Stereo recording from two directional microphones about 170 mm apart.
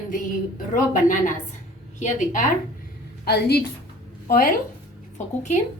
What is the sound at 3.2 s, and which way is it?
Speech, 70° left (ahead or behind).